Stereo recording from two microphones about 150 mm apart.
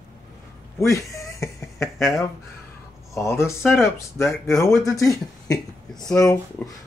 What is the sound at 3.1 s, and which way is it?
Speech, 20° left (ahead or behind).